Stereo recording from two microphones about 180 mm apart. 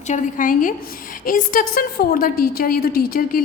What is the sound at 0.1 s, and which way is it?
A woman's voice, 45° left (ahead or behind).